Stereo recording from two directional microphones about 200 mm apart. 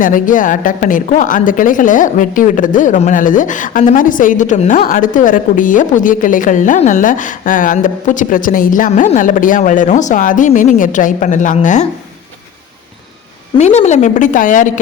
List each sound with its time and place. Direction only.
0.0 s speech: 40° left (ahead or behind)
13.6 s speech: 35° left (ahead or behind)